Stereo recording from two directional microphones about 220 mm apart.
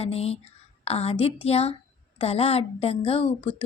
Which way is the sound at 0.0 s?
25° left (ahead or behind).